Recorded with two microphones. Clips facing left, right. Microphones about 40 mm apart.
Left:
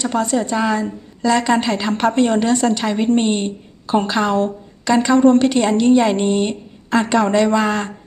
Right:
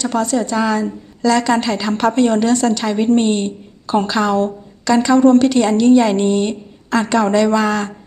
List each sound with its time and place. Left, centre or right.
0.0 s a woman's voice: left